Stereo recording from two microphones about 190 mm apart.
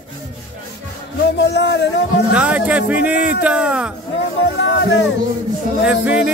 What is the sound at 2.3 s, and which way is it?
Speech, 5° right (ahead or behind).